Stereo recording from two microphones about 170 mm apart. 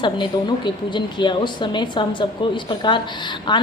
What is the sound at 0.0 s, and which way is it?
A woman's voice, 25° left (ahead or behind).